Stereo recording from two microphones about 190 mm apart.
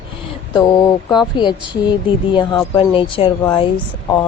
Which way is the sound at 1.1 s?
25° left (ahead or behind).